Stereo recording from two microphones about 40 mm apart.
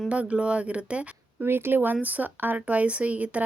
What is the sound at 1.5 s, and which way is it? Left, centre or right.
Speech, right.